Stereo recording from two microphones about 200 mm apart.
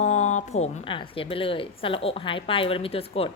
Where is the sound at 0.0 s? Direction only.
35° left (ahead or behind).